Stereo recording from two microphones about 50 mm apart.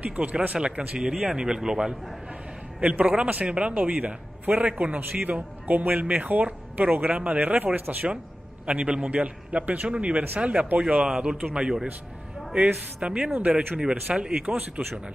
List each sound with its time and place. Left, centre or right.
0.0 s a man's voice: right
0.6 s a man's voice: centre
2.8 s a man's voice: right
8.6 s a man's voice: right
12.5 s a man's voice: right